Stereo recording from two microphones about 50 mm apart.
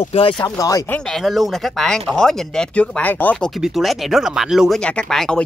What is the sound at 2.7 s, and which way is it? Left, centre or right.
Speech, left.